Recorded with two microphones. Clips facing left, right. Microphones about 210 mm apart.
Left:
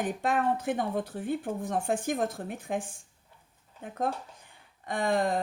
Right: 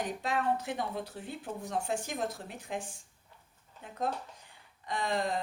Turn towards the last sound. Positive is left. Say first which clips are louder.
# left 5 dB
turn(degrees=55)  # may be behind; listen again after turning